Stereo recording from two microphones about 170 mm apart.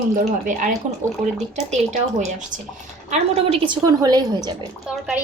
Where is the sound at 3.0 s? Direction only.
40° right (ahead or behind).